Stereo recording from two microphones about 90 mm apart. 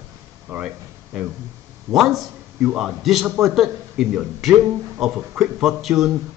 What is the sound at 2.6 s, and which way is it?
Speech, 10° right (ahead or behind).